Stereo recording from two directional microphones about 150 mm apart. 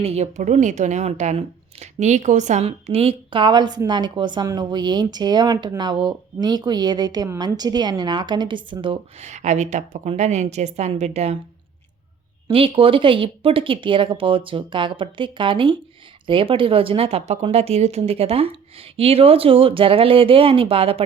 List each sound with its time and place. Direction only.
0.0 s a woman's voice: 45° right (ahead or behind)
9.2 s a woman's voice: 50° right (ahead or behind)
12.5 s a woman's voice: 40° right (ahead or behind)